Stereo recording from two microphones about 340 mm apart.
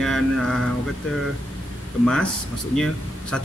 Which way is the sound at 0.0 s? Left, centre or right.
Centre.